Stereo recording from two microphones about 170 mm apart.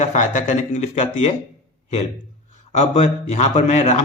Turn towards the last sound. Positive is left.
turn(degrees=45)  # may be behind; listen again after turning